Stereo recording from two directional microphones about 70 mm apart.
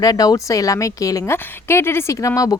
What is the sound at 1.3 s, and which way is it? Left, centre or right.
Speech, left.